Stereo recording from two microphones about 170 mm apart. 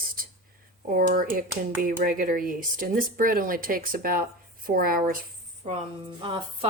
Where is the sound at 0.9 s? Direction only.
55° right (ahead or behind).